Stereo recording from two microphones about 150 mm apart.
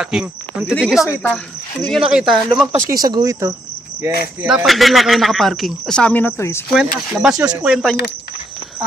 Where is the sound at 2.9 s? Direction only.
25° right (ahead or behind).